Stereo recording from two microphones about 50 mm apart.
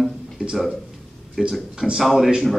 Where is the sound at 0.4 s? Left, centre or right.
Right.